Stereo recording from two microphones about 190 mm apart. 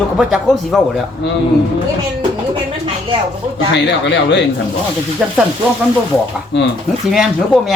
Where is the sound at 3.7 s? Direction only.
65° left (ahead or behind).